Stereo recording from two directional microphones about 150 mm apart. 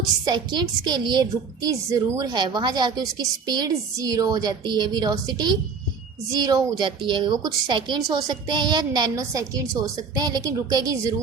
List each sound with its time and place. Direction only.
0.3 s a woman's voice: 30° right (ahead or behind)